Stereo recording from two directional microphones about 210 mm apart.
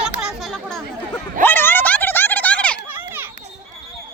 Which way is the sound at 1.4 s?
10° left (ahead or behind).